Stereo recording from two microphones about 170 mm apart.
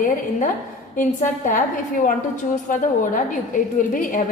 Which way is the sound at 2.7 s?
50° left (ahead or behind).